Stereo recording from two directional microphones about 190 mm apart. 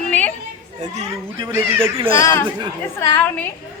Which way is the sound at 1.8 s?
30° right (ahead or behind).